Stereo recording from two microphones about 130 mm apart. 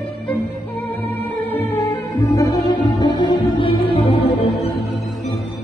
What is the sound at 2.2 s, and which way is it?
Music, 30° left (ahead or behind).